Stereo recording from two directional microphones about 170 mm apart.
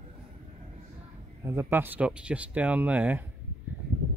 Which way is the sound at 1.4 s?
15° right (ahead or behind).